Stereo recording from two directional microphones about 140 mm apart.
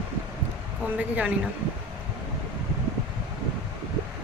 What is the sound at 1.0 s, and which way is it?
Speech, 10° right (ahead or behind).